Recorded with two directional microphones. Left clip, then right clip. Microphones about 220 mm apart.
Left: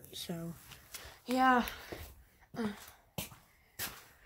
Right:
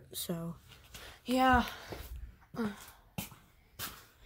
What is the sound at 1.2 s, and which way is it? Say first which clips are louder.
Speech: right 1 dB; 5° right (ahead or behind).